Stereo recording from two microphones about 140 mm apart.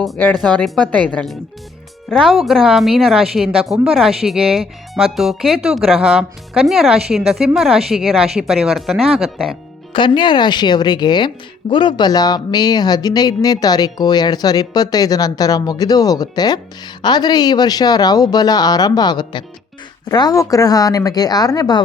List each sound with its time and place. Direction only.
0.3 s a woman's voice: 5° left (ahead or behind)
9.9 s speech: 35° left (ahead or behind)